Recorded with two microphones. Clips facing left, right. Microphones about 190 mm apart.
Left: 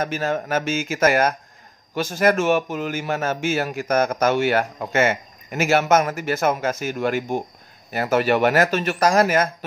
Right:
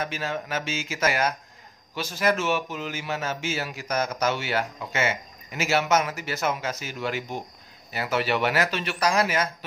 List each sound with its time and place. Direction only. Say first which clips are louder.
0.0 s a man's voice: left 6 dB; 45° left (ahead or behind)